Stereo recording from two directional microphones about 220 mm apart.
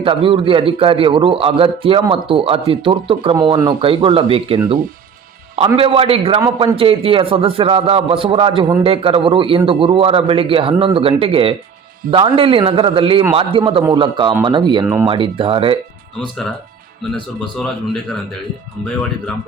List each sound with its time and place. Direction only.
0.0 s a man's voice: 25° right (ahead or behind)
6.4 s a man's voice: 15° right (ahead or behind)
6.7 s a man's voice: 25° right (ahead or behind)